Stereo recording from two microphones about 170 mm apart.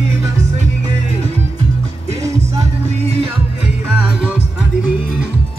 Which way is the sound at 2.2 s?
20° right (ahead or behind).